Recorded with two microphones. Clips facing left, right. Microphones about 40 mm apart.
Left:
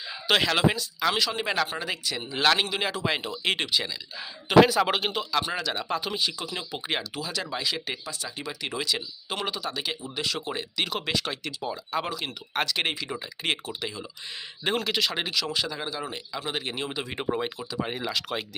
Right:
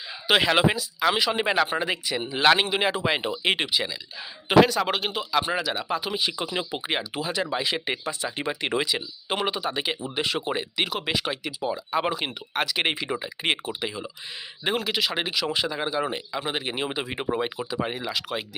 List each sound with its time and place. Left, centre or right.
0.3 s speech: centre
4.6 s speech: centre
6.3 s speech: right
7.2 s speech: right
8.9 s speech: centre
10.8 s speech: centre
12.0 s speech: right
12.5 s speech: centre
12.8 s speech: right
14.6 s speech: centre
17.6 s speech: right
17.8 s speech: centre